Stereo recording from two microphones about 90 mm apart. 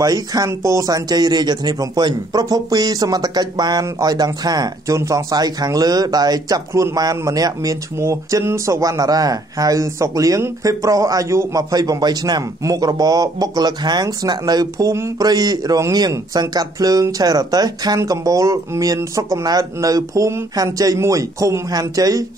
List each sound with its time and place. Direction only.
0.0 s speech: 45° right (ahead or behind)
0.5 s speech: 35° right (ahead or behind)
4.9 s speech: 35° right (ahead or behind)